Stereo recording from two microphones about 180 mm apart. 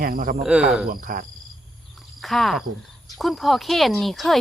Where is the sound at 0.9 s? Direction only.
50° right (ahead or behind).